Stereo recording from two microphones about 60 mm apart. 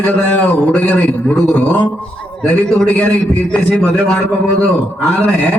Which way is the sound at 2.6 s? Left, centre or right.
Centre.